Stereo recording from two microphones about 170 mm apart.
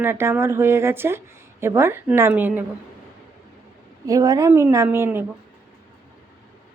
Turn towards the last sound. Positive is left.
turn(degrees=-10)  # may be behind; listen again after turning